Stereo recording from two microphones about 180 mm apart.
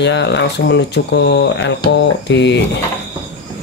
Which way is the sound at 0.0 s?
75° left (ahead or behind).